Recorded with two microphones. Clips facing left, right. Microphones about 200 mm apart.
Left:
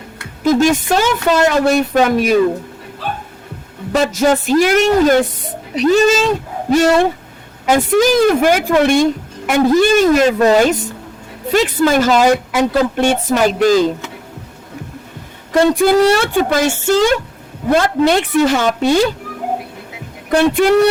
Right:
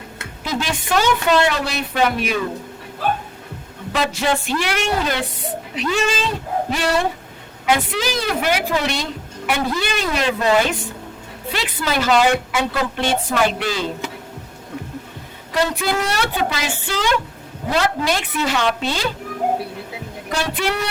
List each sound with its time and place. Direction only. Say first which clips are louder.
0.4 s a woman's voice: left 12 dB; 45° left (ahead or behind)
3.9 s a woman's voice: left 7 dB; 45° left (ahead or behind)
15.5 s a woman's voice: left 10 dB; 45° left (ahead or behind)
17.7 s speech: left 7 dB; 55° left (ahead or behind)
18.4 s a woman's voice: left 6 dB; 45° left (ahead or behind)
20.3 s a woman's voice: left 12 dB; 50° left (ahead or behind)